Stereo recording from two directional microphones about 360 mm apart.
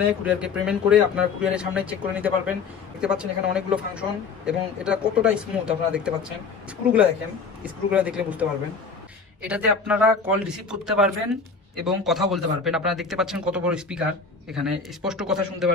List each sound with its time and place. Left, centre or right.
0.2 s speech: centre
7.6 s speech: centre